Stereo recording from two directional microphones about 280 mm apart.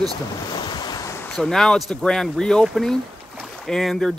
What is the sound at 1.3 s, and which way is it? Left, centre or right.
Speech, centre.